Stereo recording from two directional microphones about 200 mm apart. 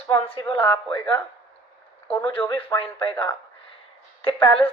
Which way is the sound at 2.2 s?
25° left (ahead or behind).